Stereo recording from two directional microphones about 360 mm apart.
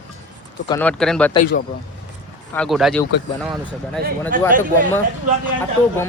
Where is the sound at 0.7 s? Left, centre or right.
Centre.